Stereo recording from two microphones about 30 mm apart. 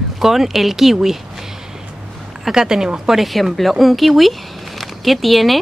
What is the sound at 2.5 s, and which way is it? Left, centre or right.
Speech, centre.